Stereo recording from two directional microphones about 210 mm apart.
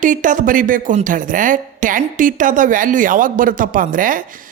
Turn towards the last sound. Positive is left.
turn(degrees=-40)  # may be behind; listen again after turning